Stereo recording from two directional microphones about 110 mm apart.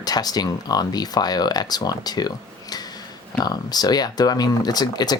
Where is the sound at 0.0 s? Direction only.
35° left (ahead or behind).